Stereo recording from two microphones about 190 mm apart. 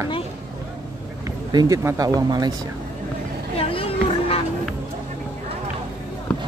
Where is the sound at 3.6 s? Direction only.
30° left (ahead or behind).